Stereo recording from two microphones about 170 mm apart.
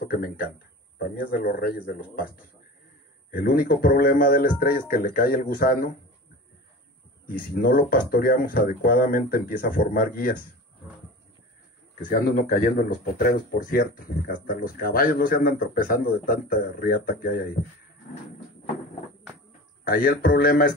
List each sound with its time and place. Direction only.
0.1 s speech: 60° left (ahead or behind)
3.3 s speech: 55° left (ahead or behind)
7.2 s speech: 55° left (ahead or behind)
12.0 s speech: 55° left (ahead or behind)
19.8 s speech: 60° left (ahead or behind)